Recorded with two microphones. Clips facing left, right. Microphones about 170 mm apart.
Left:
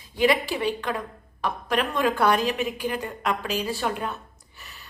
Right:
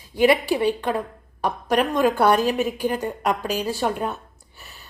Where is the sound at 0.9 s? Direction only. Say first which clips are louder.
Right 5 dB; 35° right (ahead or behind).